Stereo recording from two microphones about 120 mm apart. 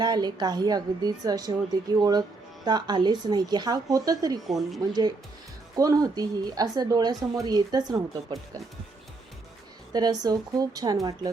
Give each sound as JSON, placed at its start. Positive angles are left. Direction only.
{"t": 0.0, "sound": "a woman's voice", "side_deg": -35}
{"t": 4.4, "sound": "speech", "side_deg": 0}
{"t": 5.7, "sound": "a woman's voice", "side_deg": -30}
{"t": 9.9, "sound": "a woman's voice", "side_deg": -35}